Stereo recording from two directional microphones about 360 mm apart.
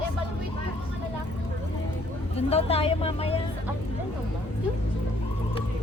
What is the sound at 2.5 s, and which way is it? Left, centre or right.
Speech, centre.